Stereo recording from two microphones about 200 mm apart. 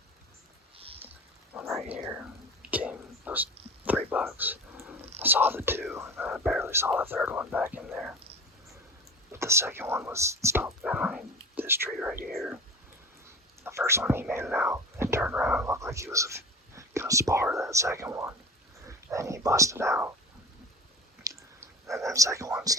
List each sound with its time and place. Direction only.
1.5 s rain: 5° right (ahead or behind)
2.0 s whispering: 5° right (ahead or behind)
6.6 s speech: 10° right (ahead or behind)
9.3 s whispering: 15° right (ahead or behind)
11.9 s speech: centre (ahead or behind)
13.7 s speech: 15° right (ahead or behind)
14.4 s whispering: 5° right (ahead or behind)
16.1 s speech: 15° right (ahead or behind)
21.2 s a sound: 15° right (ahead or behind)
21.9 s speech: 15° right (ahead or behind)